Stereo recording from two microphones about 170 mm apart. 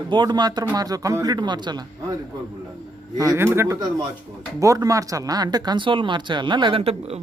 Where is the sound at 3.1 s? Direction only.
20° right (ahead or behind).